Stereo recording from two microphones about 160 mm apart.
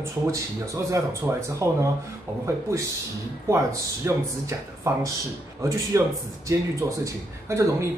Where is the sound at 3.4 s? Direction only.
20° right (ahead or behind).